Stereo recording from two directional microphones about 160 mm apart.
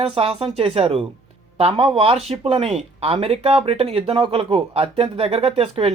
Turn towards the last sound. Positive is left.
turn(degrees=-35)  # may be behind; listen again after turning